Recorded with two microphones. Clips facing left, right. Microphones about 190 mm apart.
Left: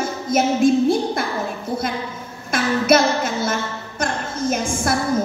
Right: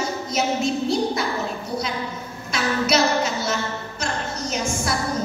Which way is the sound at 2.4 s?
50° left (ahead or behind).